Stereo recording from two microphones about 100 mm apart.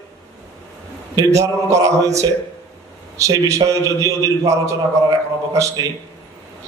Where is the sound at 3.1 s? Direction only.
30° right (ahead or behind).